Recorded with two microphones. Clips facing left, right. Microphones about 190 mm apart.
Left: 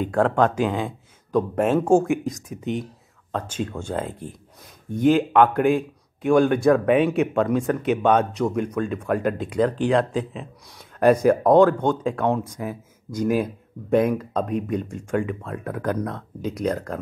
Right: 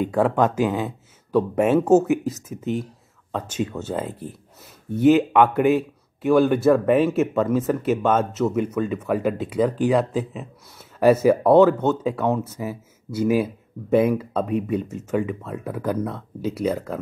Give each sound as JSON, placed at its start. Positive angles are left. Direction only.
{"t": 0.0, "sound": "a man's voice", "side_deg": -5}